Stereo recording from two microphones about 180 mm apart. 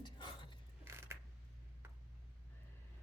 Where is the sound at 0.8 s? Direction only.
15° right (ahead or behind).